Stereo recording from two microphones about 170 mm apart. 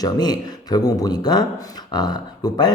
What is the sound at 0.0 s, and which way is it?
Speech, 25° left (ahead or behind).